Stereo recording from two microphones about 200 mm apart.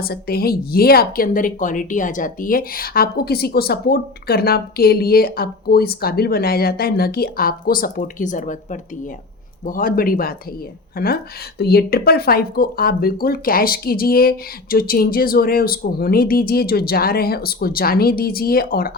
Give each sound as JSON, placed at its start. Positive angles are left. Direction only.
{"t": 0.0, "sound": "a woman's voice", "side_deg": 50}